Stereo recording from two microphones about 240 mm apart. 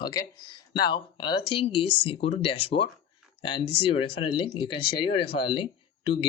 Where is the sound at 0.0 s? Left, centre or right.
Centre.